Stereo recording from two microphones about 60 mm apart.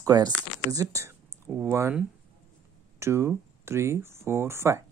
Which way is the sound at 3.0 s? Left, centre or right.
Right.